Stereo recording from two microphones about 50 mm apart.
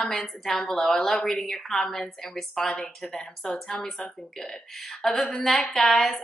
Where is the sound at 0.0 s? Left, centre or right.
Centre.